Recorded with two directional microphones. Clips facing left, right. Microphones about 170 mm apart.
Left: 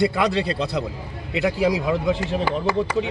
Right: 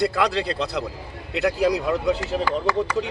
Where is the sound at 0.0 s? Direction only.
Centre (ahead or behind).